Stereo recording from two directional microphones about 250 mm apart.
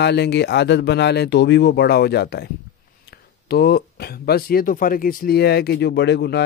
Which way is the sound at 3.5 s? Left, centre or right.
Left.